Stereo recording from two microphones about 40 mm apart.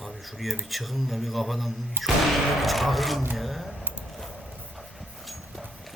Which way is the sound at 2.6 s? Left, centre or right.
Centre.